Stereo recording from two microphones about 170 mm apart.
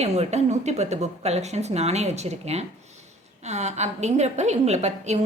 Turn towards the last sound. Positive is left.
turn(degrees=-40)  # may be behind; listen again after turning